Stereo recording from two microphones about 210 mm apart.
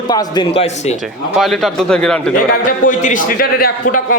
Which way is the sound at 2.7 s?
40° left (ahead or behind).